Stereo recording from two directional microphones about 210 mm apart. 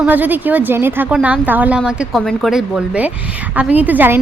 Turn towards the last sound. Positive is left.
turn(degrees=-10)  # may be behind; listen again after turning